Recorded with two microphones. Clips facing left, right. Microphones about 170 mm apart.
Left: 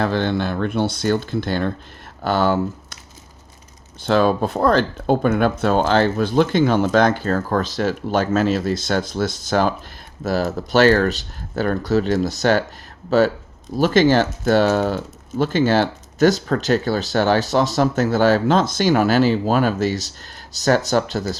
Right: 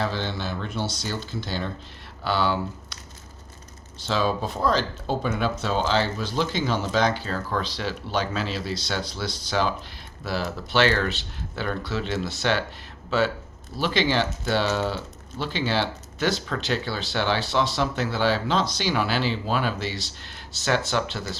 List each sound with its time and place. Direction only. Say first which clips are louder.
0.0 s speech: left 8 dB; 55° left (ahead or behind)
4.0 s speech: left 8 dB; 55° left (ahead or behind)